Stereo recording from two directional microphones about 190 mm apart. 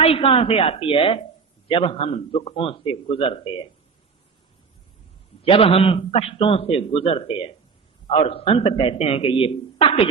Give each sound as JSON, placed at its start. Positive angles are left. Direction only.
{"t": 0.0, "sound": "a man's voice", "side_deg": 30}
{"t": 5.4, "sound": "a man's voice", "side_deg": 30}